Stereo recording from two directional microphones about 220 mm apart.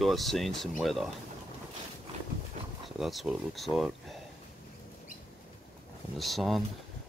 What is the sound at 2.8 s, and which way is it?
Speech, centre (ahead or behind).